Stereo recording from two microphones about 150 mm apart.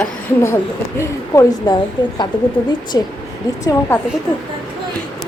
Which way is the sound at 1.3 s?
20° left (ahead or behind).